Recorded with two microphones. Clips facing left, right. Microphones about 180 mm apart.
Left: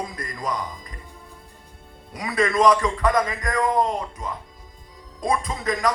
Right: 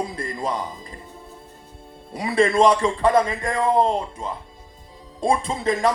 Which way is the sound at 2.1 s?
30° right (ahead or behind).